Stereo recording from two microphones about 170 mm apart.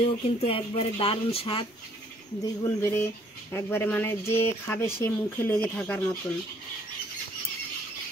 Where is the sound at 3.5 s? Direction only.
10° left (ahead or behind).